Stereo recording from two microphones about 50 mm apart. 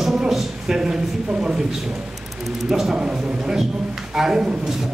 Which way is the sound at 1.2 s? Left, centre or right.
Right.